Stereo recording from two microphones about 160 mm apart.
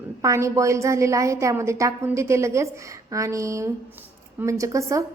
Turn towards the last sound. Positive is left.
turn(degrees=-20)  # may be behind; listen again after turning